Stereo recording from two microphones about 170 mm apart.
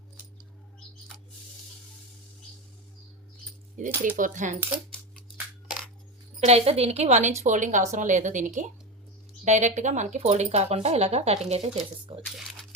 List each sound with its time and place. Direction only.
3.8 s speech: 50° right (ahead or behind)
6.4 s speech: 35° right (ahead or behind)